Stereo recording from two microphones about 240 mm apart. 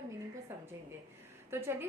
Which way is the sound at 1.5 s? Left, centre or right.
Centre.